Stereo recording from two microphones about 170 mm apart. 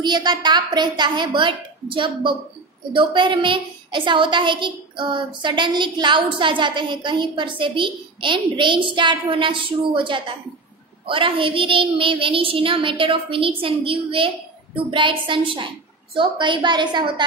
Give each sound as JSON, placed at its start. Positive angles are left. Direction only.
{"t": 0.0, "sound": "a woman's voice", "side_deg": -25}